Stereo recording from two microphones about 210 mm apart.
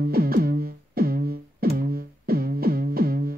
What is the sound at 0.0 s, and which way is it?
Music, 45° right (ahead or behind).